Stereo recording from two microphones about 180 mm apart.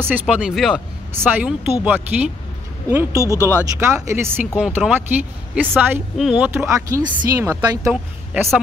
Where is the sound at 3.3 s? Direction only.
15° left (ahead or behind).